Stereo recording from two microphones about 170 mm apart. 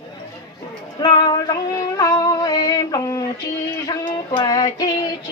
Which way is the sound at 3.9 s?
25° left (ahead or behind).